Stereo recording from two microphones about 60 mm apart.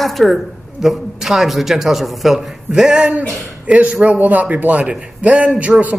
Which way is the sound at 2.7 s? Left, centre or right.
Centre.